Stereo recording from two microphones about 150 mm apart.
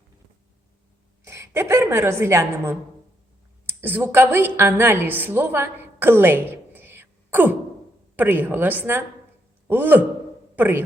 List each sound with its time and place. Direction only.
1.2 s a woman's voice: 20° right (ahead or behind)